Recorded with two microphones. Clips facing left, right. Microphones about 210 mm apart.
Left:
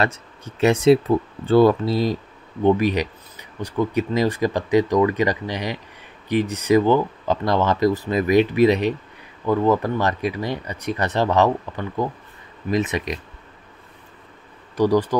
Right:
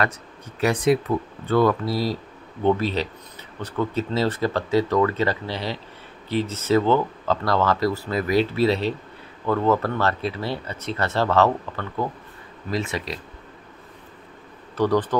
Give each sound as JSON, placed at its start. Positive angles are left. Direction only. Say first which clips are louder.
{"t": 0.0, "sound": "speech", "louder": "left 2 dB", "side_deg": 25}
{"t": 14.8, "sound": "speech", "louder": "left 3 dB", "side_deg": 10}